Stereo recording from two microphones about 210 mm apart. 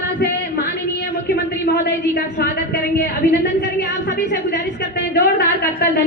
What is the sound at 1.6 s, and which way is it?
A woman's voice, 50° left (ahead or behind).